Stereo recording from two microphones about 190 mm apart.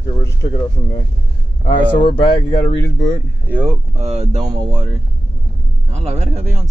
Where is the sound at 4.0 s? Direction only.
35° right (ahead or behind).